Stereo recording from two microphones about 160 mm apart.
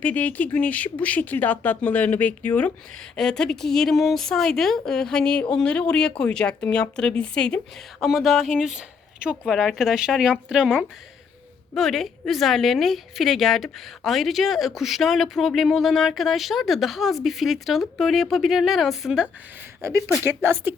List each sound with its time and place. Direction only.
0.0 s a woman's voice: 10° left (ahead or behind)
19.8 s speech: 15° right (ahead or behind)